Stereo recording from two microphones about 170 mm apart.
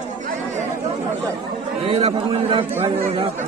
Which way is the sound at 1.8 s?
35° right (ahead or behind).